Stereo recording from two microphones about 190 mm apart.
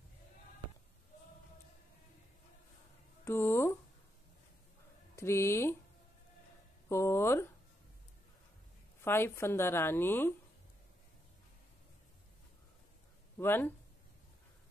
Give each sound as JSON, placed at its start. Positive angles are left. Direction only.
{"t": 3.3, "sound": "speech", "side_deg": 15}
{"t": 5.1, "sound": "speech", "side_deg": 15}
{"t": 6.9, "sound": "speech", "side_deg": 15}
{"t": 9.0, "sound": "speech", "side_deg": 10}
{"t": 13.4, "sound": "speech", "side_deg": 10}